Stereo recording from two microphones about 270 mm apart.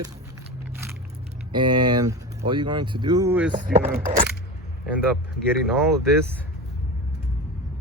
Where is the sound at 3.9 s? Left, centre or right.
Right.